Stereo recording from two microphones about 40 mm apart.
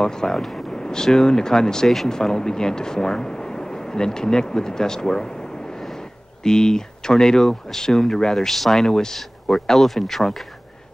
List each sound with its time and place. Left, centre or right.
0.0 s speech: centre
0.4 s speech: centre
0.7 s speech: centre
6.4 s speech: centre